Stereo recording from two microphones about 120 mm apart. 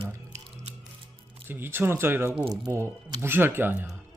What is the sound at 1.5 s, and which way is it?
Speech, 20° right (ahead or behind).